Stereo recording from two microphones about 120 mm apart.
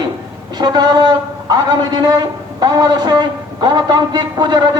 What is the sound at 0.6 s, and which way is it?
A man's voice, 35° right (ahead or behind).